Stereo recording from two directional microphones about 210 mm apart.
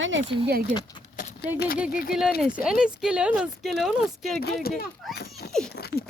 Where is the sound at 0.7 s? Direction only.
20° left (ahead or behind).